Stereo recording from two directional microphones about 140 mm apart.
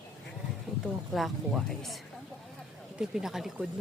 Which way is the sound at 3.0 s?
5° right (ahead or behind).